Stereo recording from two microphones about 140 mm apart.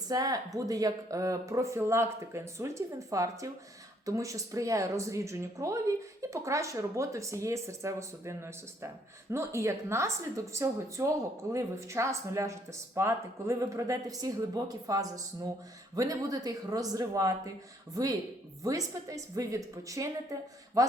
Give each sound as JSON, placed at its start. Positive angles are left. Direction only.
{"t": 0.1, "sound": "speech", "side_deg": -25}
{"t": 18.6, "sound": "speech", "side_deg": -25}